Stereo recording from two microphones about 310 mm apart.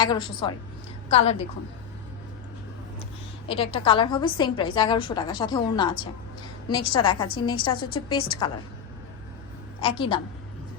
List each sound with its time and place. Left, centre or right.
0.0 s a woman's voice: centre
3.5 s a woman's voice: centre
9.8 s a woman's voice: centre